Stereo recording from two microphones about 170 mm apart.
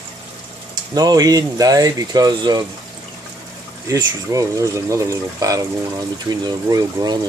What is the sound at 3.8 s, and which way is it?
Speech, 20° right (ahead or behind).